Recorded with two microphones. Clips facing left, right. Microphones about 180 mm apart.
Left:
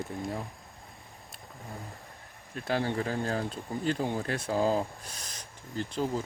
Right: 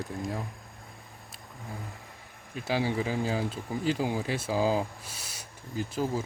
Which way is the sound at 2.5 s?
5° right (ahead or behind).